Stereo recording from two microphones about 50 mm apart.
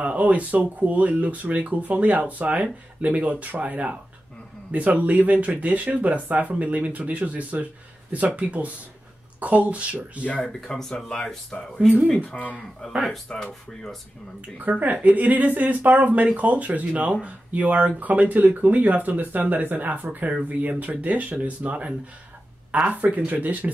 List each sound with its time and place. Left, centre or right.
0.0 s speech: right
10.8 s speech: centre
12.3 s speech: centre
14.6 s speech: right